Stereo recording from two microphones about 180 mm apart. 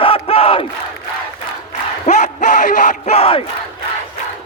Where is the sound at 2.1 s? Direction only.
40° left (ahead or behind).